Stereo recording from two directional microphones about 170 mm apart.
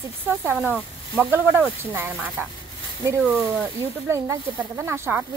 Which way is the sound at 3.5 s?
15° right (ahead or behind).